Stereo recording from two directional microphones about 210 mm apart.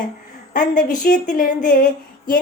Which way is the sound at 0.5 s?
40° left (ahead or behind).